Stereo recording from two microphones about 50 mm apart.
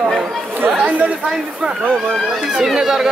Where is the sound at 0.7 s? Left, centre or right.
Right.